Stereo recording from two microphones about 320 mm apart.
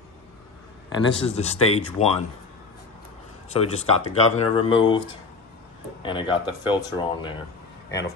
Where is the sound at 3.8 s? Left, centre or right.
Centre.